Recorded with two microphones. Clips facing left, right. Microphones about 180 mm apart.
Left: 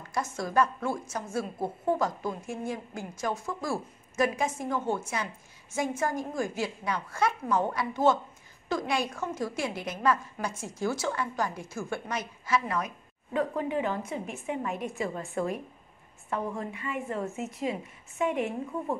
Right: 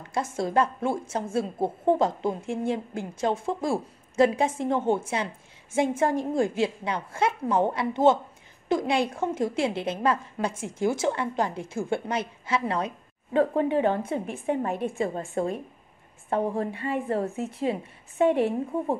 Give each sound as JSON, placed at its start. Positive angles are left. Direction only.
{"t": 0.1, "sound": "a woman's voice", "side_deg": -25}